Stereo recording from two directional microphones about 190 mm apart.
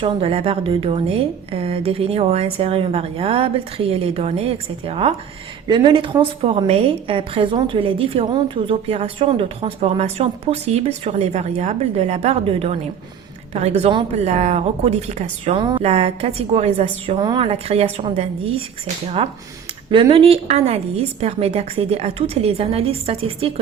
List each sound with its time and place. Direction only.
0.0 s a woman's voice: 30° right (ahead or behind)
15.5 s a woman's voice: 25° right (ahead or behind)
17.2 s a woman's voice: 25° right (ahead or behind)